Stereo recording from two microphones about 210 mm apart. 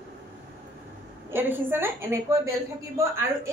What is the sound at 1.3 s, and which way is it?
Speech, 10° right (ahead or behind).